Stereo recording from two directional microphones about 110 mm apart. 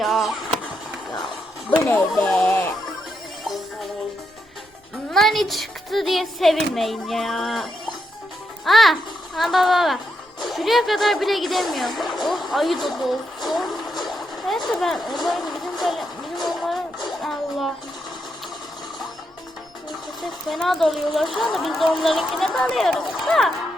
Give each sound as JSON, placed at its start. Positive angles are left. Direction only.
{"t": 0.0, "sound": "chop", "side_deg": 0}
{"t": 1.8, "sound": "speech", "side_deg": 20}
{"t": 2.2, "sound": "music", "side_deg": 15}
{"t": 3.4, "sound": "music", "side_deg": 0}
{"t": 5.1, "sound": "speech", "side_deg": 0}
{"t": 13.5, "sound": "vehicle", "side_deg": 0}
{"t": 14.7, "sound": "a sound", "side_deg": 0}
{"t": 17.1, "sound": "music", "side_deg": 0}
{"t": 20.5, "sound": "speech", "side_deg": 0}